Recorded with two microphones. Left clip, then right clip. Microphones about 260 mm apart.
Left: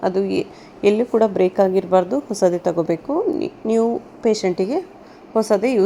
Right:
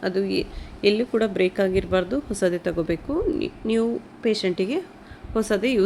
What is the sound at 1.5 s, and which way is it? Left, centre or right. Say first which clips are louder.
A woman's voice: left 6 dB; centre.